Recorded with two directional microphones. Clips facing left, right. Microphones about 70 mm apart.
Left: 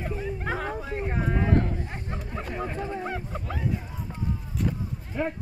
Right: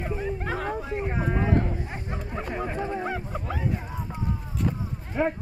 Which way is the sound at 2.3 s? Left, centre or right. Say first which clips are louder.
Right 2 dB; centre.